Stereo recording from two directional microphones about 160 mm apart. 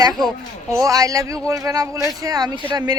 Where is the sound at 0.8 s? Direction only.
20° right (ahead or behind).